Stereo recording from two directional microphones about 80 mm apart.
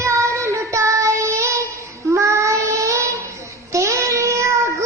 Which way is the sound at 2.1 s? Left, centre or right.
Right.